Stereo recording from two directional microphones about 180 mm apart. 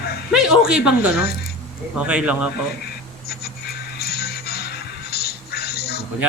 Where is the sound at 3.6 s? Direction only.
60° left (ahead or behind).